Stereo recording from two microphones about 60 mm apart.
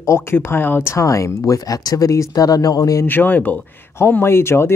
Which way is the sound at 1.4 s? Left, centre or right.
Left.